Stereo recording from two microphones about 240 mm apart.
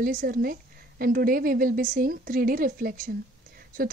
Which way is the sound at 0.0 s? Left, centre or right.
Right.